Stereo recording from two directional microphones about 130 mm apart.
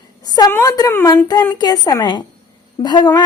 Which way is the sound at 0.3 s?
30° left (ahead or behind).